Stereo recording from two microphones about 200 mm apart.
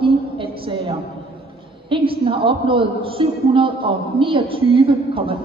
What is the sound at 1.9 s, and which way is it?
A woman's voice, 25° right (ahead or behind).